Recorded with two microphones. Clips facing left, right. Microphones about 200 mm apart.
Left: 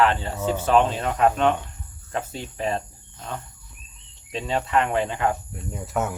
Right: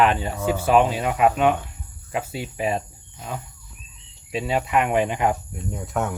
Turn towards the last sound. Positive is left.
turn(degrees=0)  # may be behind; listen again after turning